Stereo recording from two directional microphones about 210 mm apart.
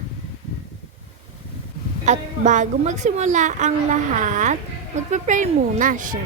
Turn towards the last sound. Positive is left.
turn(degrees=-40)  # may be behind; listen again after turning